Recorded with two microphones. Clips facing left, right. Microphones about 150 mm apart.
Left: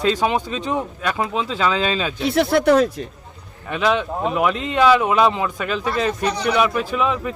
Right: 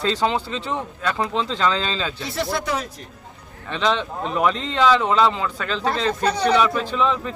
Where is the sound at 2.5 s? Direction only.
65° left (ahead or behind).